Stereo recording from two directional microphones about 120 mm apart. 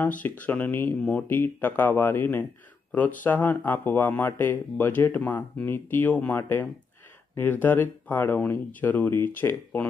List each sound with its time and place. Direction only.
0.2 s speech: 15° left (ahead or behind)